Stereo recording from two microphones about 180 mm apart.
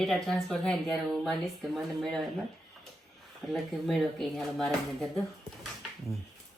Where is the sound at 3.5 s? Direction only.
Centre (ahead or behind).